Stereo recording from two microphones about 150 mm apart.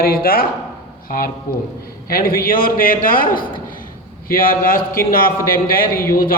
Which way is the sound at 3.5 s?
65° left (ahead or behind).